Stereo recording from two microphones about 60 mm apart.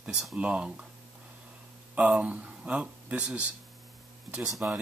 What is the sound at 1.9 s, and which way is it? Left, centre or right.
Speech, centre.